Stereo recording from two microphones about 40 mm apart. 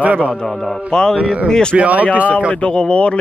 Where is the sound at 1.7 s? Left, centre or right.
Right.